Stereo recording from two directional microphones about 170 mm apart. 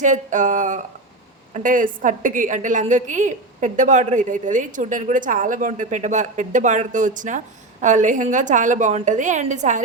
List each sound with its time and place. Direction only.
0.0 s a woman's voice: 50° right (ahead or behind)